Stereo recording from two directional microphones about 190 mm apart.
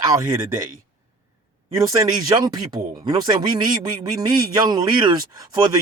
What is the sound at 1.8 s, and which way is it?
A man's voice, 20° right (ahead or behind).